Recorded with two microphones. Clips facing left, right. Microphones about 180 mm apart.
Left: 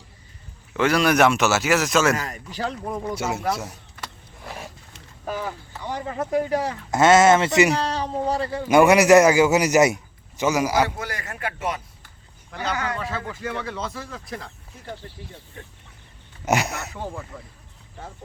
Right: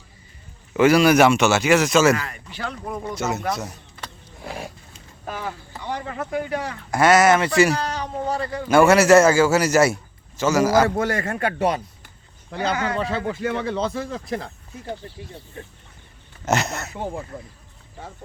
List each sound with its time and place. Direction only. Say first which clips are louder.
0.8 s speech: right 4 dB; 5° right (ahead or behind)
2.1 s speech: left 1 dB; 40° left (ahead or behind)
2.9 s a man's voice: even; 10° left (ahead or behind)
6.1 s speech: left 5 dB; 30° left (ahead or behind)
7.9 s speech: left 2 dB; 30° left (ahead or behind)
8.6 s a man's voice: even; 15° left (ahead or behind)
11.1 s a man's voice: right 8 dB; 30° right (ahead or behind)
16.5 s a man's voice: even; 10° left (ahead or behind)
16.9 s speech: right 3 dB; 15° right (ahead or behind)